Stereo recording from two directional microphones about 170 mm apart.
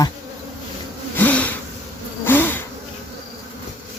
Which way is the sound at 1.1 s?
10° left (ahead or behind).